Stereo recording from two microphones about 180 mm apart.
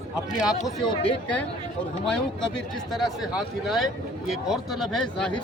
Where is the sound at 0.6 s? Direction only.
25° left (ahead or behind).